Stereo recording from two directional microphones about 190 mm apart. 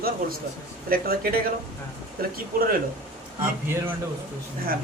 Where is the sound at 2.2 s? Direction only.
50° right (ahead or behind).